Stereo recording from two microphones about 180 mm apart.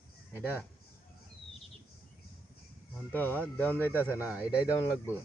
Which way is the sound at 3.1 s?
10° left (ahead or behind).